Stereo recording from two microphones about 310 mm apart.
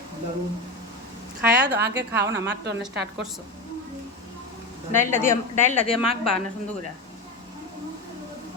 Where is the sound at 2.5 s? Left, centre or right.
Right.